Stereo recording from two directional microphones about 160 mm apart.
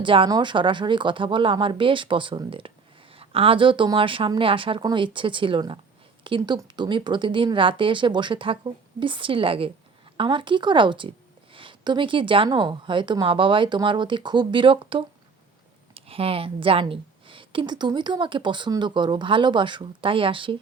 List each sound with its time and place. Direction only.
0.0 s speech: 30° right (ahead or behind)